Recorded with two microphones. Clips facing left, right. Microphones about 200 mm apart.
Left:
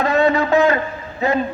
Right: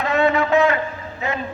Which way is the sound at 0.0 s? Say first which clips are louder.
Left 2 dB; 35° left (ahead or behind).